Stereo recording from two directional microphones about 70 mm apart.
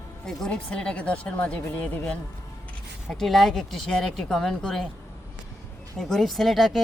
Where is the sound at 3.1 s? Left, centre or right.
Centre.